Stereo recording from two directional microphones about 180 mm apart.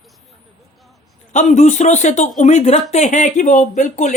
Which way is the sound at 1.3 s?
40° left (ahead or behind).